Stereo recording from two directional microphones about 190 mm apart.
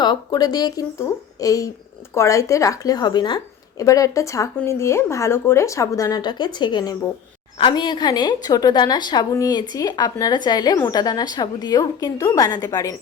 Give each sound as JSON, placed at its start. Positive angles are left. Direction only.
{"t": 0.0, "sound": "a woman's voice", "side_deg": 20}